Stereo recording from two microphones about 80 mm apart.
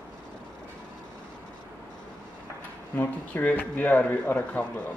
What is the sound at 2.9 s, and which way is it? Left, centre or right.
Speech, left.